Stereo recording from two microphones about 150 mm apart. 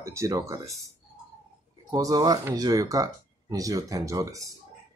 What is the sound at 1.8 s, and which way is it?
Speech, 25° right (ahead or behind).